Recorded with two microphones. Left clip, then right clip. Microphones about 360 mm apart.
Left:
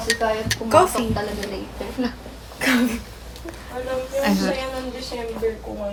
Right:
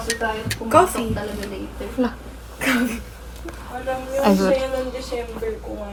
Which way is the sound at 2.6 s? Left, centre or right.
Centre.